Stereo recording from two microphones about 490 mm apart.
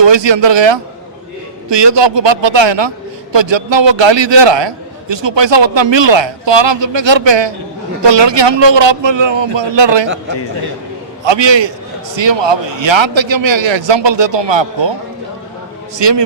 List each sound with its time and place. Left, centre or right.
0.0 s a man's voice: right
11.3 s a man's voice: right
16.0 s a man's voice: right